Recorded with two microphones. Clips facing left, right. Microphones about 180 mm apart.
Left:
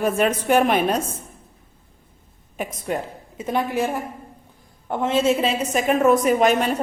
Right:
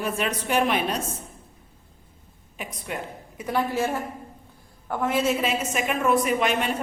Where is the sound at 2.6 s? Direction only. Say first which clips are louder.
Left 7 dB; 40° left (ahead or behind).